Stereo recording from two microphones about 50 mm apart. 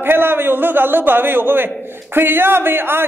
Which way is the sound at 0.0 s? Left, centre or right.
Right.